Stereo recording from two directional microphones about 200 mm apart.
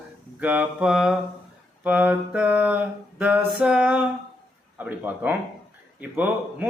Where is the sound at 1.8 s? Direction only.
10° right (ahead or behind).